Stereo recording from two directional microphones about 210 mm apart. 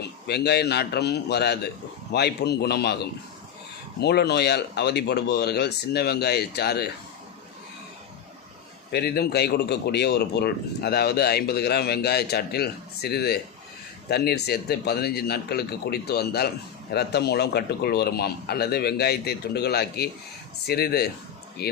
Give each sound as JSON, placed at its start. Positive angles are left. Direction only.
{"t": 0.3, "sound": "speech", "side_deg": 50}
{"t": 8.9, "sound": "speech", "side_deg": 50}